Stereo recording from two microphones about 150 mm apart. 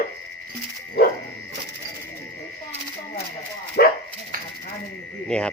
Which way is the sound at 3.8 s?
90° left.